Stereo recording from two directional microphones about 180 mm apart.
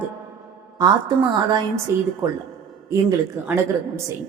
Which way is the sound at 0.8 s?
25° right (ahead or behind).